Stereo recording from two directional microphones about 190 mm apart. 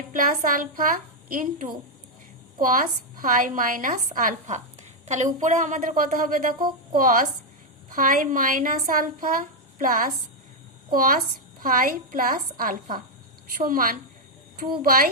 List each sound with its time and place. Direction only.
0.1 s a woman's voice: 45° right (ahead or behind)